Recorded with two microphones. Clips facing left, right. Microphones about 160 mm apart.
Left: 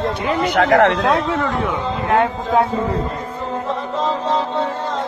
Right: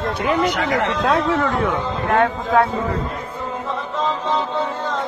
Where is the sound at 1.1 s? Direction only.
Centre (ahead or behind).